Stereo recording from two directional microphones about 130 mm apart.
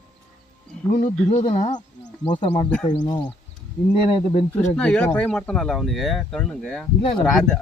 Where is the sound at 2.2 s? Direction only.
40° left (ahead or behind).